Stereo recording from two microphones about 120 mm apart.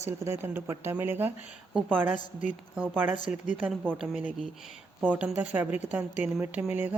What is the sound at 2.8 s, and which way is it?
Speech, 15° right (ahead or behind).